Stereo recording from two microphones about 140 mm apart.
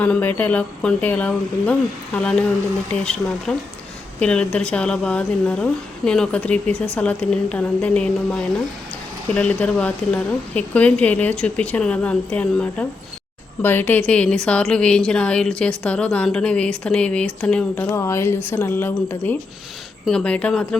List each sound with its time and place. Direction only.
0.0 s a woman's voice: 10° left (ahead or behind)
17.8 s a woman's voice: 20° left (ahead or behind)